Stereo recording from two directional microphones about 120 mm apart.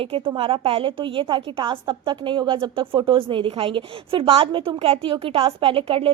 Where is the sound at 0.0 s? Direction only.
50° right (ahead or behind).